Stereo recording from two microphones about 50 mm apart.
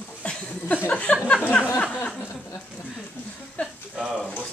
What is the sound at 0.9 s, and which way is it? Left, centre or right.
Speech, left.